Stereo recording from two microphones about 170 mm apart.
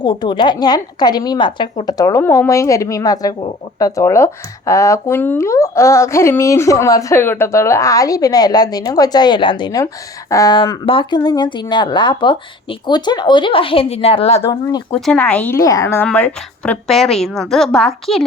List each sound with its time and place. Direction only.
0.0 s a woman's voice: 25° left (ahead or behind)
14.4 s speech: 25° left (ahead or behind)
14.9 s a woman's voice: 5° left (ahead or behind)